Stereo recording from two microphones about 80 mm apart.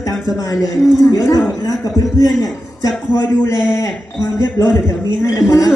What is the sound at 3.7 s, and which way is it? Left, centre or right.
Speech, left.